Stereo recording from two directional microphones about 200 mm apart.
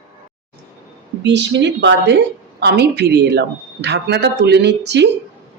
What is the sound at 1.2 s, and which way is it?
A woman's voice, 60° right (ahead or behind).